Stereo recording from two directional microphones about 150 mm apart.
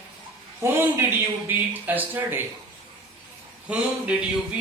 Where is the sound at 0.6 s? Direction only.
15° right (ahead or behind).